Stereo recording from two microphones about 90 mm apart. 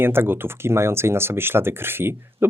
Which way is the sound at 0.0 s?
25° right (ahead or behind).